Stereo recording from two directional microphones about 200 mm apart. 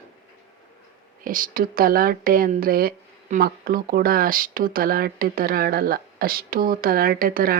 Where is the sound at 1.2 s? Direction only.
45° right (ahead or behind).